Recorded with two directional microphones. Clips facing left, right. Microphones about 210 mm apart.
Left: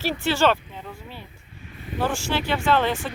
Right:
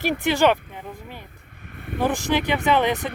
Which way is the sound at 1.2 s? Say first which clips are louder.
Left 1 dB; 60° right (ahead or behind).